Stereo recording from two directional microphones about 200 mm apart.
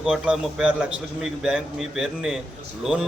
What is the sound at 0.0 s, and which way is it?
A man's voice, centre (ahead or behind).